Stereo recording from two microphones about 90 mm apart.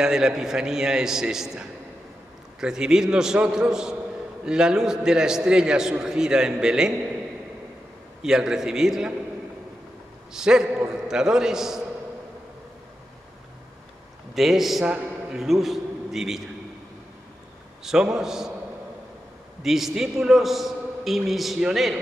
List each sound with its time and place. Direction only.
0.0 s a man's voice: 5° right (ahead or behind)
8.2 s a man's voice: 5° right (ahead or behind)
10.3 s a man's voice: 5° right (ahead or behind)
14.3 s a man's voice: centre (ahead or behind)
17.8 s a man's voice: 5° right (ahead or behind)
19.6 s a man's voice: 5° right (ahead or behind)